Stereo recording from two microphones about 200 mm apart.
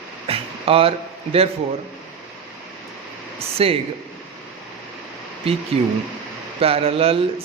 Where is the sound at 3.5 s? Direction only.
30° right (ahead or behind).